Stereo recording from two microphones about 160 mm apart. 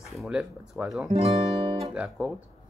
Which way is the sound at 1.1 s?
35° right (ahead or behind).